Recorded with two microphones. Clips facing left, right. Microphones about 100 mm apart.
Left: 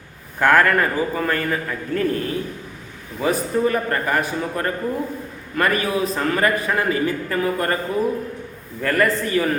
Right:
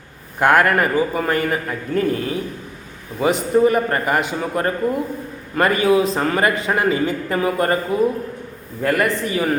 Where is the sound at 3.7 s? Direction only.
15° right (ahead or behind).